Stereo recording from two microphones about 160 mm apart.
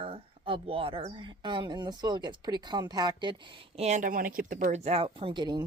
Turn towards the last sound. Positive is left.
turn(degrees=-30)  # may be behind; listen again after turning